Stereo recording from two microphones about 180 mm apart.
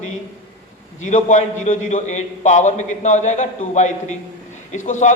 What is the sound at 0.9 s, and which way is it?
A man's voice, 40° left (ahead or behind).